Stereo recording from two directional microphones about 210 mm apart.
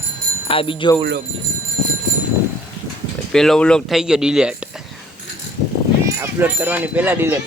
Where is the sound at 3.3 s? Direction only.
Centre (ahead or behind).